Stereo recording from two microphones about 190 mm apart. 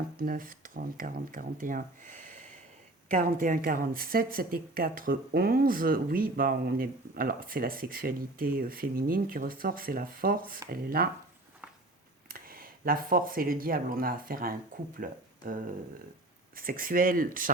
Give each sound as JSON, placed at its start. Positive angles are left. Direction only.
{"t": 0.2, "sound": "speech", "side_deg": -50}
{"t": 12.3, "sound": "speech", "side_deg": -50}